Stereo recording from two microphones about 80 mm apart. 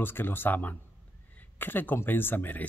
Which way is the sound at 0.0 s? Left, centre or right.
Left.